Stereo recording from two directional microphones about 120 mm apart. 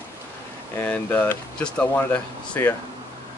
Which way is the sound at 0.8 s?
15° left (ahead or behind).